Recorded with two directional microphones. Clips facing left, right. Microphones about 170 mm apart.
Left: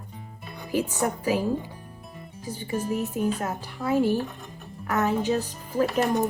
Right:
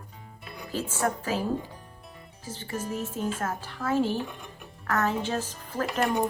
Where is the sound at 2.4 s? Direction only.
15° left (ahead or behind).